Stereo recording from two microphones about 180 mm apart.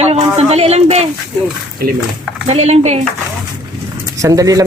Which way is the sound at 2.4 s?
35° right (ahead or behind).